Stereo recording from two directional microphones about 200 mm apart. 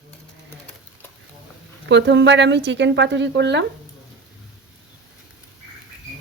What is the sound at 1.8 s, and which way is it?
Speech, 60° right (ahead or behind).